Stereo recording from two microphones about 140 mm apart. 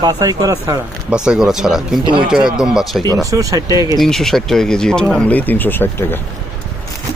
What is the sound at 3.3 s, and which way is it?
Speech, 25° right (ahead or behind).